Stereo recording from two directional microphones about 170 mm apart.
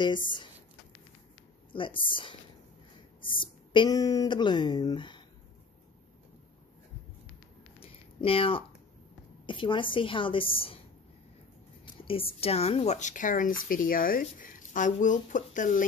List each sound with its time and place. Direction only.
1.7 s speech: 30° left (ahead or behind)
3.3 s speech: 25° left (ahead or behind)
7.8 s a sound: 35° left (ahead or behind)
9.5 s speech: 30° left (ahead or behind)
11.8 s a woman's voice: 30° left (ahead or behind); by 15.8 s 50° left (ahead or behind)